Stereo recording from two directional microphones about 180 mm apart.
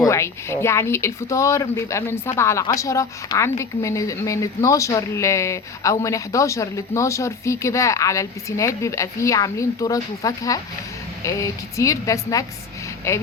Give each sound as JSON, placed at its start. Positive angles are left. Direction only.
{"t": 0.1, "sound": "speech", "side_deg": 15}